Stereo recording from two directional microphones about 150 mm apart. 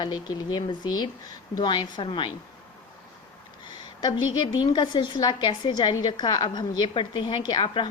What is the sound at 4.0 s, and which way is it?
A woman's voice, 30° left (ahead or behind).